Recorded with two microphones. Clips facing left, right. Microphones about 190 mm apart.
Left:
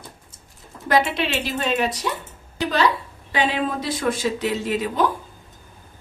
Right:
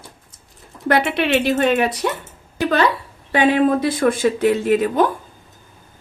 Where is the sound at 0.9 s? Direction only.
60° right (ahead or behind).